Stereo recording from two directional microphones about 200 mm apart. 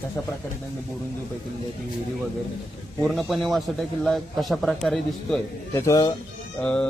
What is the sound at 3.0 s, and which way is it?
A man's voice, centre (ahead or behind).